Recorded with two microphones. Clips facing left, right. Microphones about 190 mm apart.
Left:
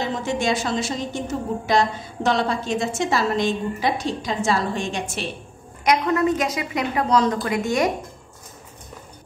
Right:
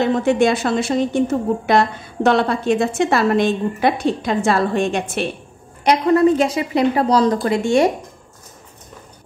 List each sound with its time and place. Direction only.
0.0 s a woman's voice: 60° right (ahead or behind)
5.9 s a woman's voice: 30° right (ahead or behind)